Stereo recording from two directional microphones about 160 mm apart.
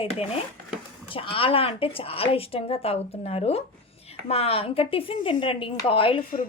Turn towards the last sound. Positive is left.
turn(degrees=35)  # may be behind; listen again after turning